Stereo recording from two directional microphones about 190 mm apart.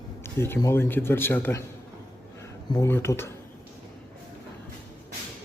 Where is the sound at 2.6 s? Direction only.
20° left (ahead or behind).